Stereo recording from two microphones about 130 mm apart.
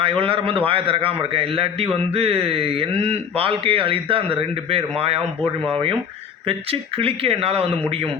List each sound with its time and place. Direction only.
0.0 s a man's voice: 45° right (ahead or behind)
6.5 s a man's voice: 45° right (ahead or behind)